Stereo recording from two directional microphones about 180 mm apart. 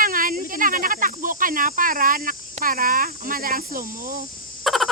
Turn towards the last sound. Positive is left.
turn(degrees=0)  # may be behind; listen again after turning